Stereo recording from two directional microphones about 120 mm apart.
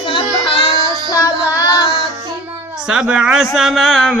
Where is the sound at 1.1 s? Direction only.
30° left (ahead or behind).